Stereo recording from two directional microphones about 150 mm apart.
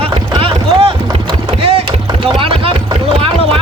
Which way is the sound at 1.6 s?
40° right (ahead or behind).